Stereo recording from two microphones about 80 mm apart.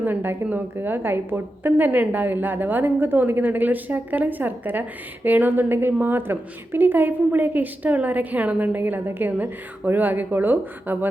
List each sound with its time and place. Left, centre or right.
0.0 s a woman's voice: right